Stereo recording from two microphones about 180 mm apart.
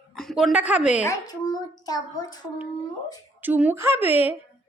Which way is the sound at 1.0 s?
20° left (ahead or behind).